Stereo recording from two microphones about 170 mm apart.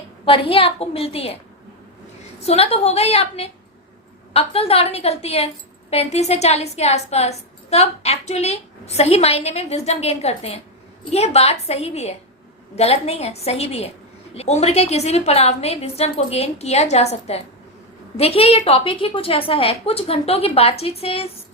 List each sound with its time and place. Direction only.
0.3 s a woman's voice: 35° left (ahead or behind)
2.4 s a woman's voice: 35° left (ahead or behind)